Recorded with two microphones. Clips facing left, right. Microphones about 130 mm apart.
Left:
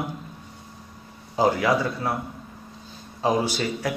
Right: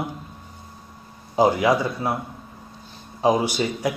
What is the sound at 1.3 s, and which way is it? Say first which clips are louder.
Speech: right 3 dB; 15° right (ahead or behind).